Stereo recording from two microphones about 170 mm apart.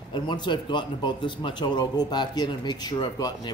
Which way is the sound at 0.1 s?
25° left (ahead or behind).